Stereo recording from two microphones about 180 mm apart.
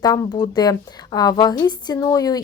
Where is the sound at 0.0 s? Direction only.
20° left (ahead or behind).